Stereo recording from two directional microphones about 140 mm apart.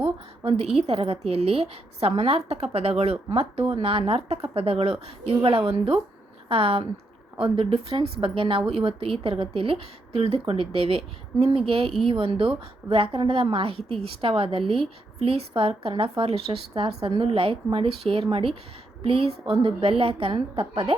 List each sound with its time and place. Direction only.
0.0 s a woman's voice: 45° right (ahead or behind)